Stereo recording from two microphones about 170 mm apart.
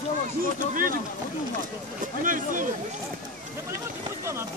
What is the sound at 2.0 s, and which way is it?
Speech, 50° right (ahead or behind).